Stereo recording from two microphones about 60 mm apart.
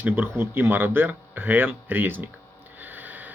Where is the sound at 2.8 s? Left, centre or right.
Right.